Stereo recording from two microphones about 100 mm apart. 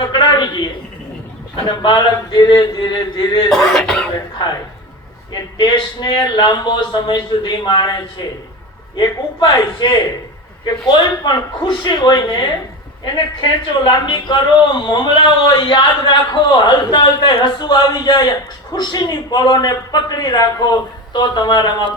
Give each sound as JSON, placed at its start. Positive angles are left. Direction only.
{"t": 0.0, "sound": "a sound", "side_deg": 50}
{"t": 1.8, "sound": "a man's voice", "side_deg": 45}
{"t": 3.5, "sound": "speech", "side_deg": 5}
{"t": 4.4, "sound": "a man's voice", "side_deg": 50}